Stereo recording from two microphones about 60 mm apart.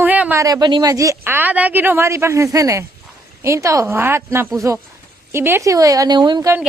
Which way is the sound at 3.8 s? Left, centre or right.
Right.